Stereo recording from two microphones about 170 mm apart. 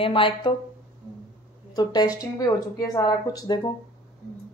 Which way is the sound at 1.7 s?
25° left (ahead or behind).